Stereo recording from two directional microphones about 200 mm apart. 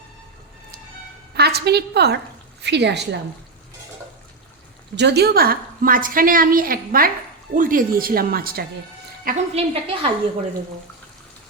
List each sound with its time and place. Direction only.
1.4 s a woman's voice: 55° right (ahead or behind)
4.9 s a woman's voice: 55° right (ahead or behind)
9.2 s a woman's voice: 35° right (ahead or behind)